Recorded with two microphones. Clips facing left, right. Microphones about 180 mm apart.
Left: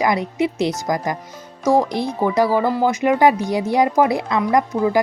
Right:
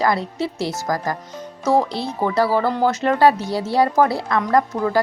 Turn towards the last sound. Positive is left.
turn(degrees=15)  # may be behind; listen again after turning